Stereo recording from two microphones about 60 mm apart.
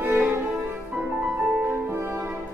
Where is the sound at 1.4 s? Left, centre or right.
Right.